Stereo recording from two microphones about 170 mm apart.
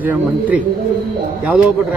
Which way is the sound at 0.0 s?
10° right (ahead or behind).